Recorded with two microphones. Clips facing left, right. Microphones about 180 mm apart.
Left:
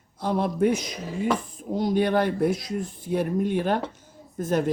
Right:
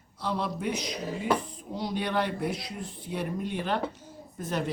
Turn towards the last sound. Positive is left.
turn(degrees=45)  # may be behind; listen again after turning